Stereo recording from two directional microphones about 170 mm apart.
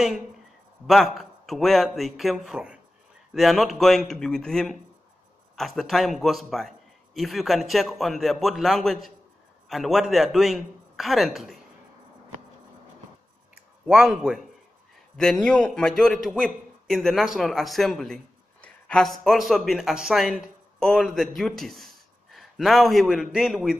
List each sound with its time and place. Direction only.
0.8 s a man's voice: centre (ahead or behind)
13.8 s a man's voice: 5° right (ahead or behind)